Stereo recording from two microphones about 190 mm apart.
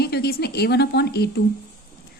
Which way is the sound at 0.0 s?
55° left (ahead or behind).